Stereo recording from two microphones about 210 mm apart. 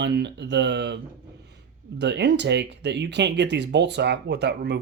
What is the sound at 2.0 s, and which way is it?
Speech, 55° right (ahead or behind).